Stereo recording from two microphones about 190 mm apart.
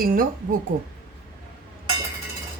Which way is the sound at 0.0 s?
50° right (ahead or behind).